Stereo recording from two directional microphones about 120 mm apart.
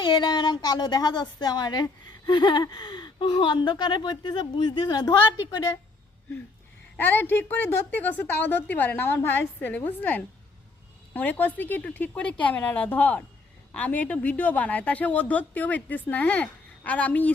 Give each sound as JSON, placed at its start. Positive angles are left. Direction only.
{"t": 0.0, "sound": "a woman's voice", "side_deg": 35}
{"t": 6.9, "sound": "a woman's voice", "side_deg": 15}